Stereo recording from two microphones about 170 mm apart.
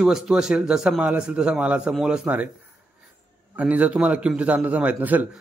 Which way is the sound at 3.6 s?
10° right (ahead or behind).